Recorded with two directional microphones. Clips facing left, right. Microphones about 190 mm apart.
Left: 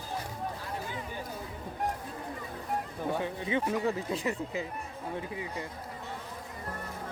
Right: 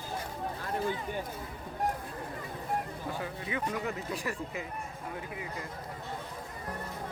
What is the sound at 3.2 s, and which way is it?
Speech, 25° left (ahead or behind).